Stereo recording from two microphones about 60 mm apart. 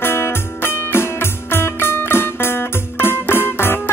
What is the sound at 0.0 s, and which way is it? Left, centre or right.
Music, left.